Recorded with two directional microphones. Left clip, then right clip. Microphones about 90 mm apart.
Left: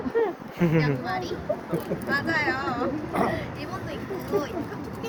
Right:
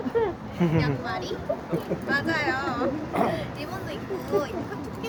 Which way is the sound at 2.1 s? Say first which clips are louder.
Even; 20° right (ahead or behind).